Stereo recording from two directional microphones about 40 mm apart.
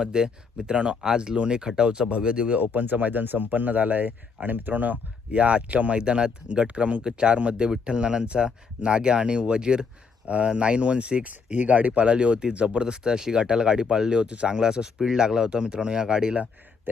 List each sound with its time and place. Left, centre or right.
0.0 s speech: right
2.6 s speech: right
5.3 s speech: right
6.0 s speech: right